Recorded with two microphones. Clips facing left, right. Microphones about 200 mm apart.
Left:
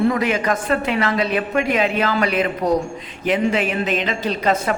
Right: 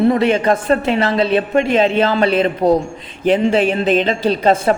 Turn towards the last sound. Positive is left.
turn(degrees=-30)  # may be behind; listen again after turning